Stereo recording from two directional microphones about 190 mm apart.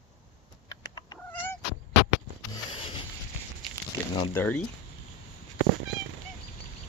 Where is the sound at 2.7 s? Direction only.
30° left (ahead or behind).